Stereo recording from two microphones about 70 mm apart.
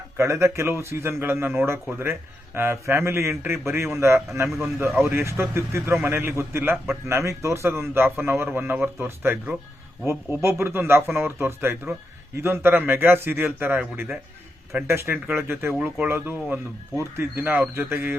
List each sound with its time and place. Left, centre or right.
0.2 s a man's voice: right
4.4 s speech: centre
5.0 s a man's voice: right